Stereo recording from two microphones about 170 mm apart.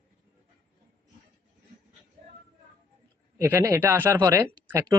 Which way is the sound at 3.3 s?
15° right (ahead or behind).